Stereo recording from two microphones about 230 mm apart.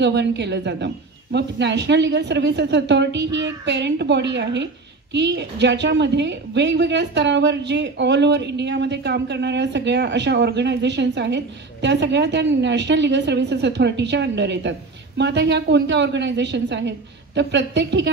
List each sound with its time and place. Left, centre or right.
0.0 s a woman's voice: right